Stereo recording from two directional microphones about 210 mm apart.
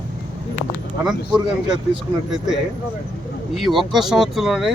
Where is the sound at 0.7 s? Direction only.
Centre (ahead or behind).